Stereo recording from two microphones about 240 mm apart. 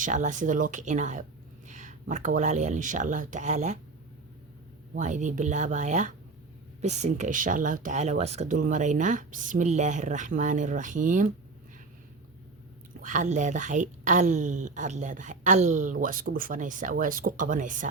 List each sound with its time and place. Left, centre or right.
0.0 s speech: right
4.9 s speech: right
13.0 s speech: right